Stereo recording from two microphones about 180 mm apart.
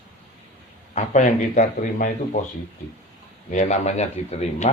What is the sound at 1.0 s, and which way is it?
Speech, 45° left (ahead or behind).